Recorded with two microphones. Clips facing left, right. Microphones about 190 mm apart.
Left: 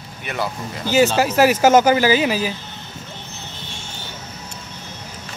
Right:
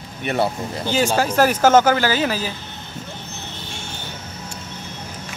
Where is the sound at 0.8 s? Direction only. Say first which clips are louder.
Left 3 dB; 5° left (ahead or behind).